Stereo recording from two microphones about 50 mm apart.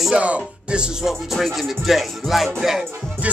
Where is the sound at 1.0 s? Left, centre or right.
Centre.